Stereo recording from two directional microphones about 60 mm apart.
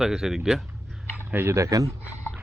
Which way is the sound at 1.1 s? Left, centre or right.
Right.